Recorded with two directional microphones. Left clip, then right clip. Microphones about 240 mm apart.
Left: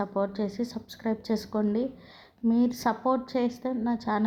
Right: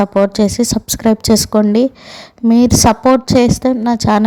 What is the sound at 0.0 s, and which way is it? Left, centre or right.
Speech, right.